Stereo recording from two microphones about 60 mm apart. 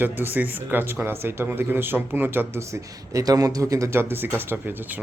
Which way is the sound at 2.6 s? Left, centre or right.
Right.